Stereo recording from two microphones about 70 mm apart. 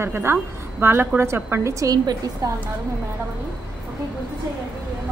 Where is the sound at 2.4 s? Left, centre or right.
Right.